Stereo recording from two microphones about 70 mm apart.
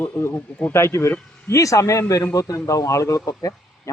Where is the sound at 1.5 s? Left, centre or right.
Left.